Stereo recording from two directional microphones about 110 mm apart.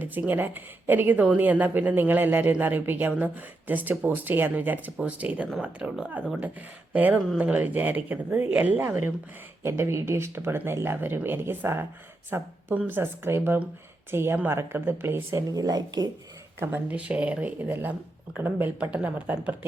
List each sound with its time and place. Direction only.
0.0 s a woman's voice: 15° right (ahead or behind); by 16.0 s 35° right (ahead or behind)
16.6 s a woman's voice: 15° right (ahead or behind)